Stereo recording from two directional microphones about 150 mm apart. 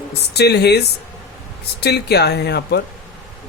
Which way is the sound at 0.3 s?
90° left.